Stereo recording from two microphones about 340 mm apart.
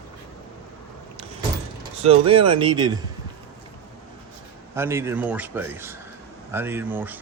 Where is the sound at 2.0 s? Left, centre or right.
Centre.